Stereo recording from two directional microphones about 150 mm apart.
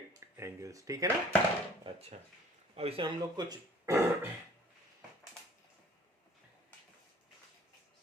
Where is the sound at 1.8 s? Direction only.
40° right (ahead or behind).